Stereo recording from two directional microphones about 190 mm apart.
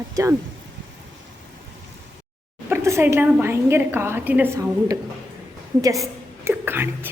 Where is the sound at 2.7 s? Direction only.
15° right (ahead or behind).